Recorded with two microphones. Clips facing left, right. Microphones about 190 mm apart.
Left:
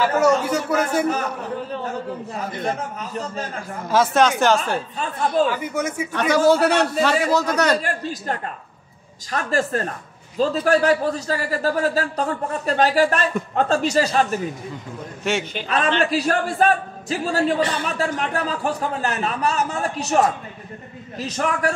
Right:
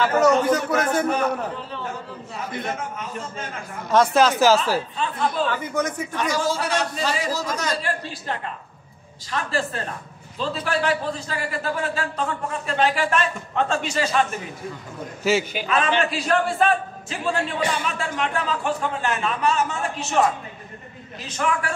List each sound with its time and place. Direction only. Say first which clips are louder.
0.0 s a man's voice: even; 10° left (ahead or behind)
2.6 s a man's voice: left 3 dB; 35° left (ahead or behind)
3.9 s speech: even; centre (ahead or behind)
4.9 s a woman's voice: left 2 dB; 45° left (ahead or behind)
5.5 s a man's voice: even; 10° left (ahead or behind)
6.1 s a man's voice: left 8 dB; 65° left (ahead or behind)
7.8 s a woman's voice: left 2 dB; 45° left (ahead or behind)
15.2 s speech: right 3 dB; centre (ahead or behind)
16.1 s a man's voice: left 1 dB; 40° left (ahead or behind)
21.3 s a man's voice: left 2 dB; 40° left (ahead or behind)